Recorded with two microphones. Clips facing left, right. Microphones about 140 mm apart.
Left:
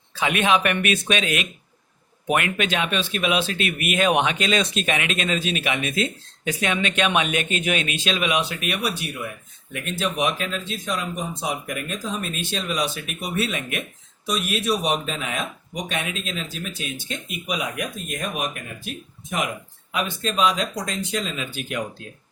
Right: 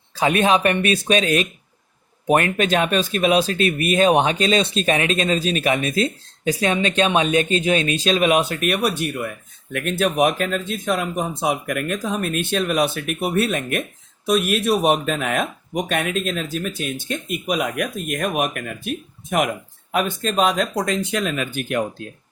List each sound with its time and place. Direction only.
0.1 s speech: 40° right (ahead or behind)